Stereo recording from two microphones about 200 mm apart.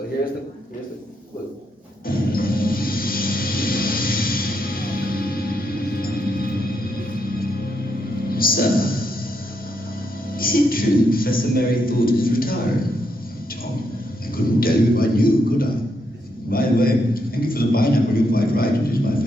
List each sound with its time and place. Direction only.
2.0 s music: 45° left (ahead or behind)
8.3 s music: 45° left (ahead or behind)
10.2 s music: 45° left (ahead or behind)
14.3 s a sound: 45° left (ahead or behind)